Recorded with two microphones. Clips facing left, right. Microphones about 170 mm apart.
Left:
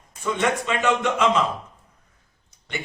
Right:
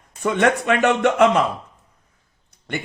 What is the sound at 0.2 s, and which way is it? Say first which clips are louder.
Speech: right 5 dB; 60° right (ahead or behind).